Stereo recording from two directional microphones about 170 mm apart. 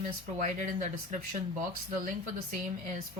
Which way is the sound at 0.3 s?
45° right (ahead or behind).